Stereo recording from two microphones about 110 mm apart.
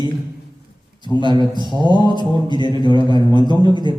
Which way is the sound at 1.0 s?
45° left (ahead or behind).